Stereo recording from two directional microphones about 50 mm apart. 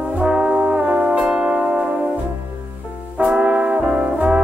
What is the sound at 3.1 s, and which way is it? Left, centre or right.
Brass instrument, right.